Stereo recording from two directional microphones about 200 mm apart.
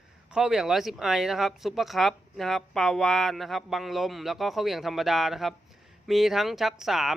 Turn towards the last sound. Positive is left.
turn(degrees=0)  # may be behind; listen again after turning